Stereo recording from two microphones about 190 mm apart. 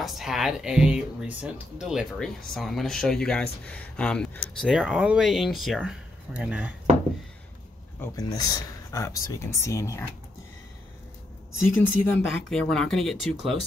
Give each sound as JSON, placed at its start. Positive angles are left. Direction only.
{"t": 0.0, "sound": "speech", "side_deg": 0}
{"t": 4.6, "sound": "speech", "side_deg": -5}
{"t": 8.0, "sound": "speech", "side_deg": 20}
{"t": 12.0, "sound": "speech", "side_deg": 0}